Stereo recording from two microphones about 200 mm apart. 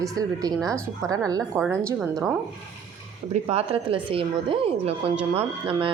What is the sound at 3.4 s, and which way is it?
A woman's voice, 30° right (ahead or behind).